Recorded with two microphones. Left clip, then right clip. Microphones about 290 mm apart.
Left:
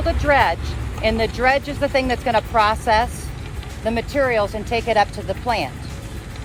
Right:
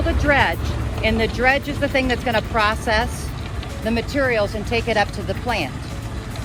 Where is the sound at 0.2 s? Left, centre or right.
Left.